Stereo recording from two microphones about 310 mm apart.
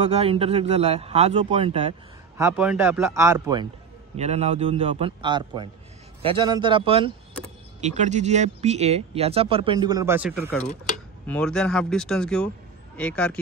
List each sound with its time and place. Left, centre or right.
0.0 s speech: centre
2.4 s speech: centre